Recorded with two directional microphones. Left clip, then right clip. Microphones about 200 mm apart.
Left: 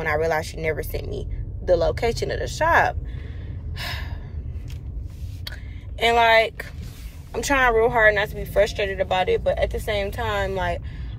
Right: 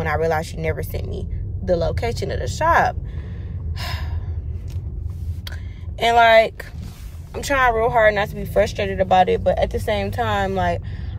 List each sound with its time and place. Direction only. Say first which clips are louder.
0.0 s speech: right 2 dB; 5° right (ahead or behind)
3.7 s gasp: even; 10° right (ahead or behind)
5.9 s a woman's voice: right 4 dB; 20° right (ahead or behind)
7.3 s speech: right 1 dB; 5° right (ahead or behind)